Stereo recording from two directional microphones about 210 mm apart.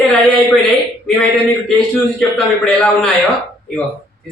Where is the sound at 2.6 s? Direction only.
5° left (ahead or behind).